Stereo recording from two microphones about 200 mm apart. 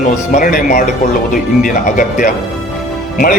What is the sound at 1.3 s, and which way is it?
Speech, 45° left (ahead or behind).